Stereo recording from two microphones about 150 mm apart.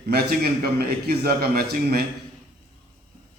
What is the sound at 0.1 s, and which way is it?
A man's voice, 90° right.